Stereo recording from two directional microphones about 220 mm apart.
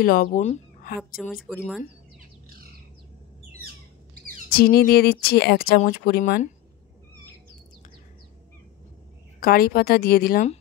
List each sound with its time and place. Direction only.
0.0 s speech: 40° left (ahead or behind)
1.1 s speech: centre (ahead or behind)
4.5 s speech: 45° left (ahead or behind)
9.4 s speech: 40° left (ahead or behind)